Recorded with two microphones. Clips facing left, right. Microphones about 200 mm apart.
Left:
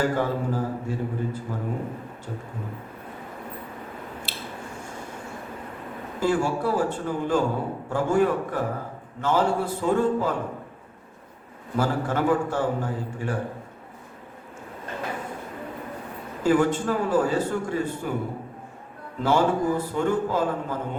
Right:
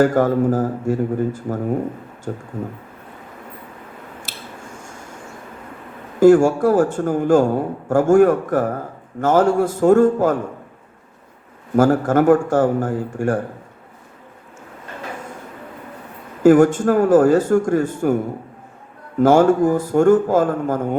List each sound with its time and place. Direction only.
0.0 s a man's voice: 45° right (ahead or behind)
6.1 s a man's voice: 45° right (ahead or behind)
11.8 s a man's voice: 45° right (ahead or behind)
16.4 s a man's voice: 45° right (ahead or behind)
19.2 s a man's voice: 45° right (ahead or behind)